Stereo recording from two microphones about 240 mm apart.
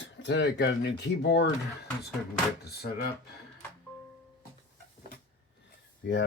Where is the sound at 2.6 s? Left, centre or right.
Left.